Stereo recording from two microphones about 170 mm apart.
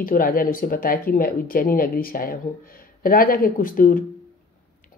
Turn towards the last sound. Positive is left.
turn(degrees=55)  # may be behind; listen again after turning